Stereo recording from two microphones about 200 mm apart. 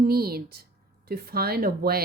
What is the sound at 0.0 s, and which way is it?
Speech, 50° right (ahead or behind).